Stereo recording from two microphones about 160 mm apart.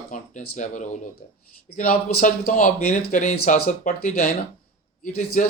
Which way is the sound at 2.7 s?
45° left (ahead or behind).